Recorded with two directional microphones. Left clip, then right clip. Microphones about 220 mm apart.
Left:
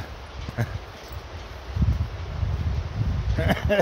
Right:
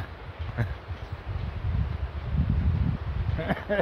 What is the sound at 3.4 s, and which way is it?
Speech, 20° left (ahead or behind).